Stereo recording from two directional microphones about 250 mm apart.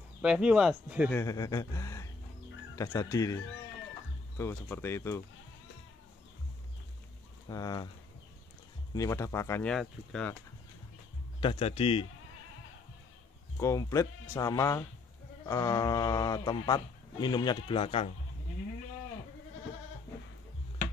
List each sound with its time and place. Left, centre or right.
0.2 s speech: centre
1.1 s a man's voice: centre
4.4 s a man's voice: centre
7.4 s a man's voice: centre
8.9 s a man's voice: centre
11.4 s a man's voice: left
13.6 s a man's voice: centre